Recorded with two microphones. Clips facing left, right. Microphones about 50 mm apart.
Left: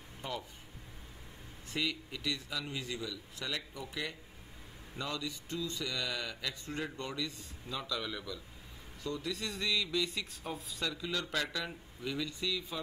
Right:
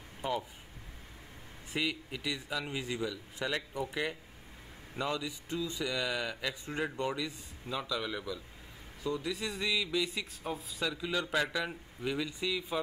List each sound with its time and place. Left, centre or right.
0.2 s speech: centre
1.7 s a man's voice: centre